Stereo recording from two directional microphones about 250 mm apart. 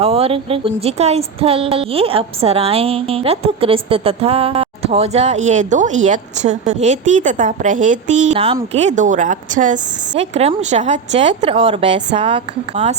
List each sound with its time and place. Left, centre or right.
0.0 s speech: right